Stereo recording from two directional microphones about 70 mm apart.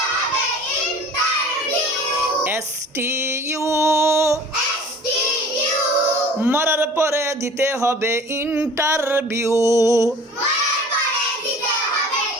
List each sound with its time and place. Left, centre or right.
3.0 s female singing: right
6.5 s speech: right